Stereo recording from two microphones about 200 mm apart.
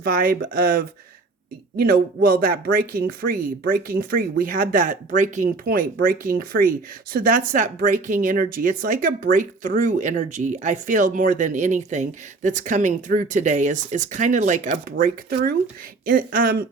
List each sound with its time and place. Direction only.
0.0 s speech: 45° right (ahead or behind)